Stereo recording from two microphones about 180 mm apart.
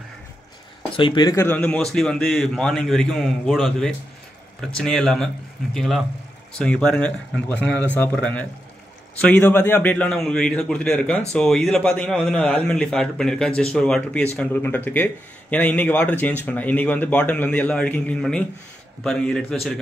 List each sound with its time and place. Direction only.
0.9 s speech: 25° left (ahead or behind)
1.4 s a man's voice: 10° left (ahead or behind)